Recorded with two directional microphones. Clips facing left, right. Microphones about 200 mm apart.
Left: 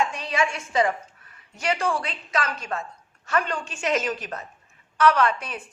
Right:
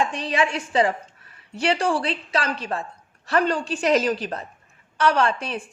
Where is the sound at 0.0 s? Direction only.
30° right (ahead or behind).